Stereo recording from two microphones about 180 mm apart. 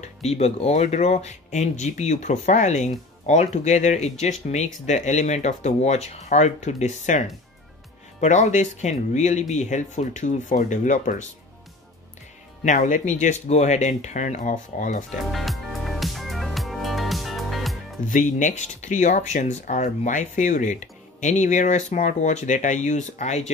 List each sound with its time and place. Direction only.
0.0 s speech: 35° left (ahead or behind)
12.6 s speech: 45° left (ahead or behind)
15.3 s music: centre (ahead or behind)
18.0 s speech: 45° left (ahead or behind)